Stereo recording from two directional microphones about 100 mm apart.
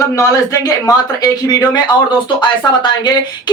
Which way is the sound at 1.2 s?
40° left (ahead or behind).